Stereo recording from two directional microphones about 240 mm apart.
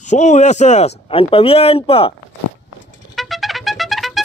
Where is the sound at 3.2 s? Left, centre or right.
Centre.